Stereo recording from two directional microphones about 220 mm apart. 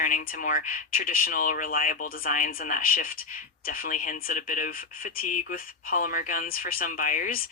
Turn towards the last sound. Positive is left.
turn(degrees=40)  # may be behind; listen again after turning